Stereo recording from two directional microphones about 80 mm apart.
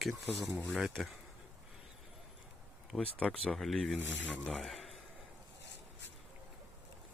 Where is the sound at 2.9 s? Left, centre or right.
Centre.